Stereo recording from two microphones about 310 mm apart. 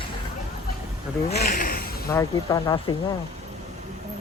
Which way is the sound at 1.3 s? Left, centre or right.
Left.